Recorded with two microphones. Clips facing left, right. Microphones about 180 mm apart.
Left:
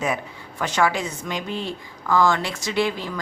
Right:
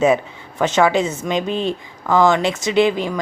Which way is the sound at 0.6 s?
20° right (ahead or behind).